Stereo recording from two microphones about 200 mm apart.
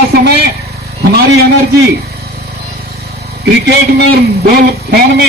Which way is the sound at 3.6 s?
55° right (ahead or behind).